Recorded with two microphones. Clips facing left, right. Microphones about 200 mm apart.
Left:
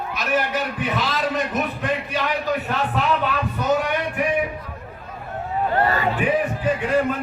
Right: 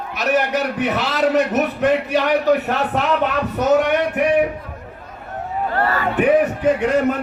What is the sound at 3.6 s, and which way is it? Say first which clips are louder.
Music: right 7 dB; 70° right (ahead or behind).